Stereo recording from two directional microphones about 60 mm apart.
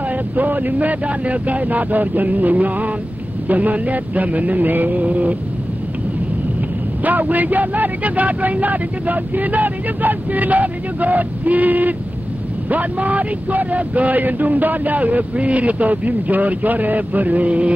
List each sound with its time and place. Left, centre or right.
0.1 s speech: right
7.0 s speech: right